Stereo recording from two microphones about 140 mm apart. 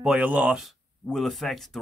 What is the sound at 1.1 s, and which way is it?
Speech, centre (ahead or behind).